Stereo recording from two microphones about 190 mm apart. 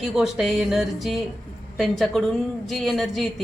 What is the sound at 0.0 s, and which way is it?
A woman's voice, centre (ahead or behind).